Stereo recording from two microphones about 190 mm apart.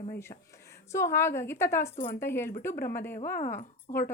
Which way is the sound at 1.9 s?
45° left (ahead or behind).